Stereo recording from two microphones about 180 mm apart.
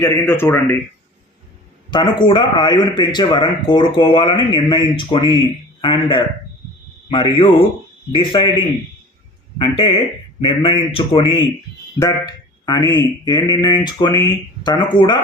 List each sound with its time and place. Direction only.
0.0 s speech: 15° left (ahead or behind)
1.9 s a man's voice: 25° left (ahead or behind)
9.6 s a man's voice: 30° left (ahead or behind)